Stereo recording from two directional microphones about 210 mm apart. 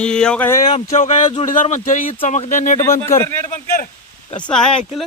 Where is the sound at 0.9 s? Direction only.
35° left (ahead or behind).